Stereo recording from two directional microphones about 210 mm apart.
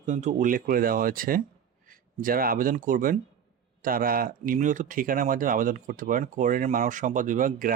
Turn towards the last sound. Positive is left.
turn(degrees=-40)  # may be behind; listen again after turning